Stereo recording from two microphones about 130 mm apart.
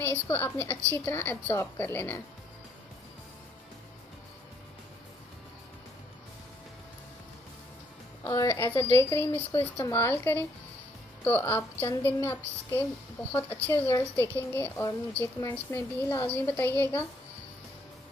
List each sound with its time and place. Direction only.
0.3 s speech: 15° left (ahead or behind)
8.2 s a woman's voice: 25° left (ahead or behind)